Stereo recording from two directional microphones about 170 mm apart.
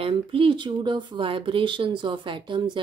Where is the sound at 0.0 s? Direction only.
30° right (ahead or behind).